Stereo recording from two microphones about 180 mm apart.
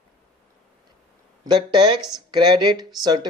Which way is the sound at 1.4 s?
25° right (ahead or behind).